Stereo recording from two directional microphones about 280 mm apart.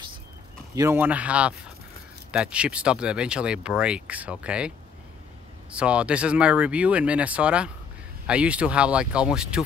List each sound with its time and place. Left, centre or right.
0.7 s speech: centre